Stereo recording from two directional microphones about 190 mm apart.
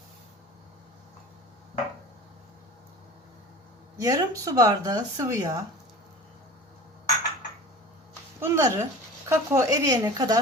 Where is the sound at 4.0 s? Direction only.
20° right (ahead or behind).